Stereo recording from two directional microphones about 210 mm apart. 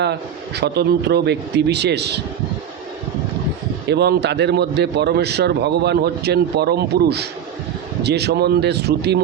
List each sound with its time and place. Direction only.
0.0 s a man's voice: 50° right (ahead or behind)
3.8 s a man's voice: 50° right (ahead or behind)